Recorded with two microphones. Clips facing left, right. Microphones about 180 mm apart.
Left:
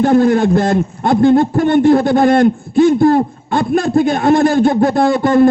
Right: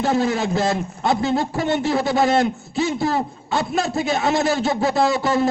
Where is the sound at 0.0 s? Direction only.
50° left (ahead or behind).